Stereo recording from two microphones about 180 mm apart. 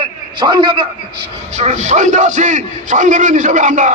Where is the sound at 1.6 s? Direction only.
40° right (ahead or behind).